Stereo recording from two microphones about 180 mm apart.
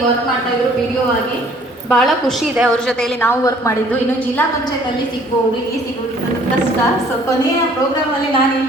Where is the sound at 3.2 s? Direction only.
15° left (ahead or behind).